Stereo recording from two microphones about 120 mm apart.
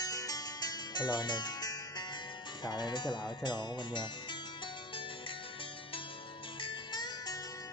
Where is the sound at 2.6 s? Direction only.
35° left (ahead or behind).